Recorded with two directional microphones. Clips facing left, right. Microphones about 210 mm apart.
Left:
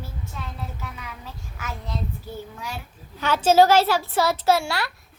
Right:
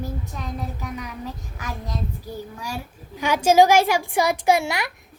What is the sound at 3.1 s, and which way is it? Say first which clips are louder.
A child's voice: right 1 dB; 10° right (ahead or behind).